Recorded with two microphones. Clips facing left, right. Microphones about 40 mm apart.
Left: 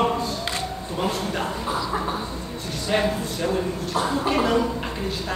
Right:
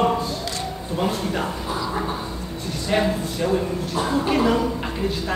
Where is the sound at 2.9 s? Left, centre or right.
Centre.